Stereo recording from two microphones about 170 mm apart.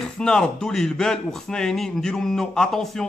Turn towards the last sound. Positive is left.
turn(degrees=0)  # may be behind; listen again after turning